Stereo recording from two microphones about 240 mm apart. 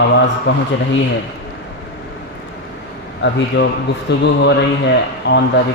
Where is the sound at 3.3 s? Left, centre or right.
Left.